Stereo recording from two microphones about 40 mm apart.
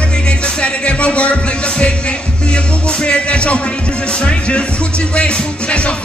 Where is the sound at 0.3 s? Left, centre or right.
Left.